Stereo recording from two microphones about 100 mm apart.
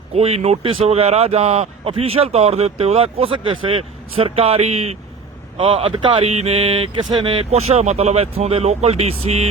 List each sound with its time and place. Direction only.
0.2 s speech: 90° right
5.5 s speech: 60° right (ahead or behind)
6.2 s mantra: 90° right; by 7.0 s 70° right (ahead or behind)
7.0 s speech: 45° right (ahead or behind)
7.3 s speech: 75° right (ahead or behind)